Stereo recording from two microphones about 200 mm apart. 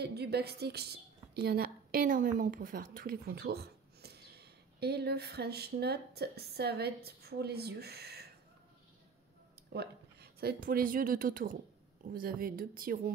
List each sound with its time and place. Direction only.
0.0 s a woman's voice: 55° right (ahead or behind)
9.7 s speech: 55° right (ahead or behind)